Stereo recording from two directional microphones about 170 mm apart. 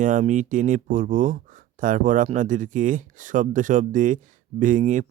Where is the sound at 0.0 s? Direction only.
50° right (ahead or behind).